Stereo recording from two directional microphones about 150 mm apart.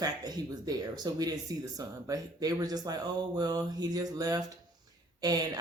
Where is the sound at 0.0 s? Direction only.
25° right (ahead or behind).